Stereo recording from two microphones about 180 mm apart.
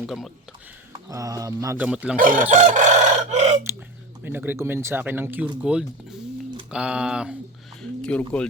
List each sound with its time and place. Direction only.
0.0 s speech: centre (ahead or behind)
1.0 s speech: 20° right (ahead or behind)
2.1 s chicken: 50° right (ahead or behind)
4.2 s speech: 10° right (ahead or behind)
7.8 s a sound: 5° left (ahead or behind)